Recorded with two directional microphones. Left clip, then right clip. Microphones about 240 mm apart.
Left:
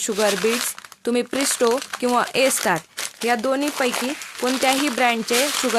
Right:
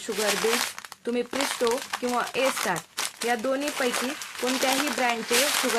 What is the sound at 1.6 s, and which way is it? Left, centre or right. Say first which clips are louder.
Speech: left 8 dB; left.